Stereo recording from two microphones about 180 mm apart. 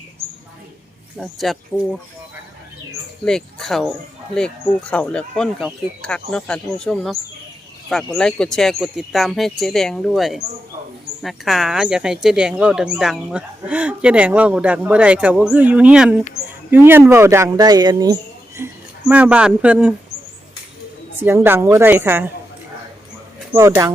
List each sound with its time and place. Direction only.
1.1 s speech: centre (ahead or behind)
3.2 s speech: centre (ahead or behind); by 18.7 s 20° right (ahead or behind)
19.0 s speech: 5° right (ahead or behind)
21.2 s speech: 15° right (ahead or behind)
23.6 s speech: 15° right (ahead or behind)